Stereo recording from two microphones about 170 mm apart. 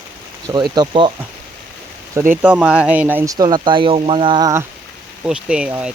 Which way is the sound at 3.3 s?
25° right (ahead or behind).